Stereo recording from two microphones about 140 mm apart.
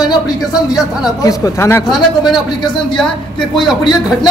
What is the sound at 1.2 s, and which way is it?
Speech, 25° left (ahead or behind).